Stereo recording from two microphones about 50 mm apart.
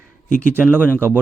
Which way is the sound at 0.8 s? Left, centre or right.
Left.